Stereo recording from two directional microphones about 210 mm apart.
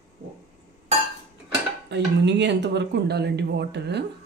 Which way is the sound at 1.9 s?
55° right (ahead or behind).